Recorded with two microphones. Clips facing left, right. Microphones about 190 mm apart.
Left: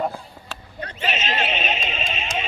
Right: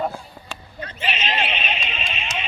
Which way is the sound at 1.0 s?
45° left (ahead or behind).